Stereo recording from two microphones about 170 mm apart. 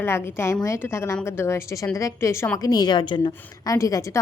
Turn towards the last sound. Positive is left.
turn(degrees=20)  # may be behind; listen again after turning